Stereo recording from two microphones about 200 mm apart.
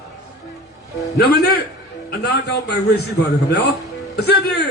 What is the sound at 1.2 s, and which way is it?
Speech, 50° left (ahead or behind).